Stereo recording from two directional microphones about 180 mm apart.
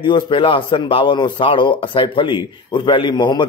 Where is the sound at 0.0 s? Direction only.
30° left (ahead or behind).